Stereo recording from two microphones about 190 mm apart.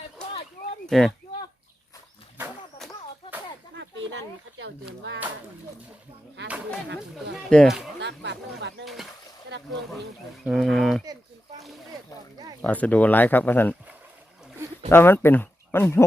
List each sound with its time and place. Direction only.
0.9 s speech: centre (ahead or behind)
2.4 s a sound: centre (ahead or behind)
3.8 s a sound: 75° right (ahead or behind)
6.4 s speech: 65° right (ahead or behind)
7.3 s speech: centre (ahead or behind)
7.9 s speech: 65° right (ahead or behind)
8.8 s speech: centre (ahead or behind)
9.5 s a sound: 65° right (ahead or behind)
10.4 s speech: centre (ahead or behind)
12.6 s speech: 10° left (ahead or behind)
14.8 s speech: 10° left (ahead or behind)